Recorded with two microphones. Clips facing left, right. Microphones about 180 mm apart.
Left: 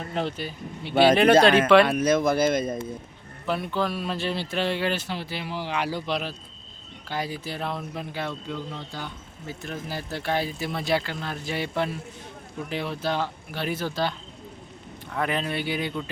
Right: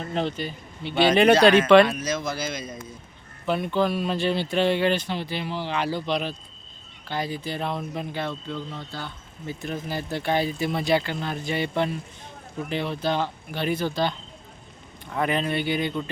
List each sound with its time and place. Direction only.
0.1 s speech: 5° left (ahead or behind)
1.9 s speech: 55° left (ahead or behind)
3.4 s speech: centre (ahead or behind)
9.6 s speech: centre (ahead or behind)